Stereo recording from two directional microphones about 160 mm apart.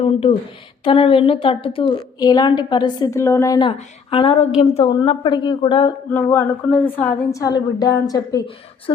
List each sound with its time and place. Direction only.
0.0 s a woman's voice: 35° left (ahead or behind); by 3.6 s 20° left (ahead or behind)
3.8 s a woman's voice: 35° left (ahead or behind)
6.1 s speech: 10° left (ahead or behind)